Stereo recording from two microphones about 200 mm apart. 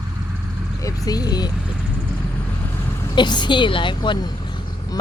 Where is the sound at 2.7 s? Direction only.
10° left (ahead or behind).